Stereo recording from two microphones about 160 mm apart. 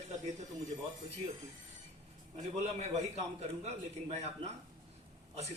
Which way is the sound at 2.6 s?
40° right (ahead or behind).